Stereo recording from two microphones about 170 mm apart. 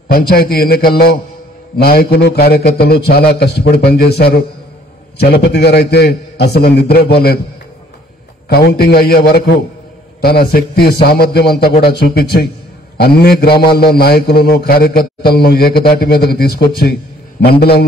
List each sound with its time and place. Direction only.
0.1 s a man's voice: 60° left (ahead or behind)
8.5 s a man's voice: 70° left (ahead or behind)